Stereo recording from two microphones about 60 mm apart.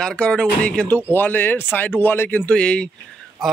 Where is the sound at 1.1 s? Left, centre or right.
Left.